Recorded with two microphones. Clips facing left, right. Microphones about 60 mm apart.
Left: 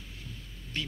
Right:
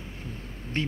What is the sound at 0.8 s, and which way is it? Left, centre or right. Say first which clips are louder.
Speech: right 7 dB; right.